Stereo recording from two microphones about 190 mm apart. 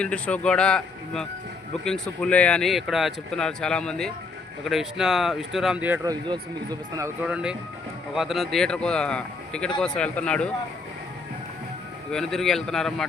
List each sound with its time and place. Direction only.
0.0 s a man's voice: 5° left (ahead or behind)
6.1 s speech: 20° right (ahead or behind)
7.3 s a man's voice: 5° right (ahead or behind)
12.1 s a man's voice: centre (ahead or behind)